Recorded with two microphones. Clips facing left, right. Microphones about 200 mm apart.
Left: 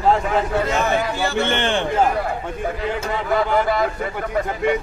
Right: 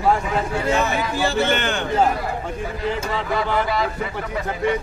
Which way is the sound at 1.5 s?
30° left (ahead or behind).